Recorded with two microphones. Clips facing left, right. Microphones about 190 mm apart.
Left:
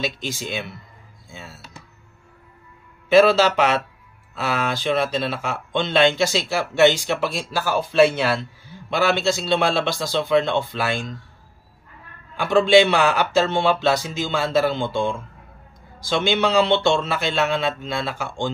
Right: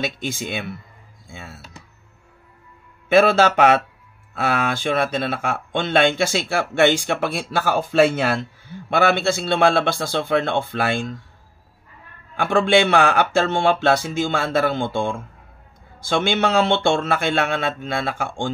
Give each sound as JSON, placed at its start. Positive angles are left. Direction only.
{"t": 0.0, "sound": "speech", "side_deg": -55}
{"t": 3.1, "sound": "speech", "side_deg": -55}
{"t": 8.9, "sound": "speech", "side_deg": -55}
{"t": 12.4, "sound": "speech", "side_deg": -55}